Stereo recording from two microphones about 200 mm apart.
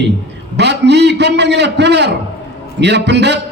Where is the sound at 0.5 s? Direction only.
60° right (ahead or behind).